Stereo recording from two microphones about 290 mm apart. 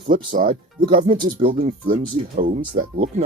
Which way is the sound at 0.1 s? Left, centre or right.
Right.